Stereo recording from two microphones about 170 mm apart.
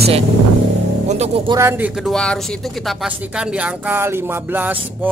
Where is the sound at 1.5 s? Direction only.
15° right (ahead or behind).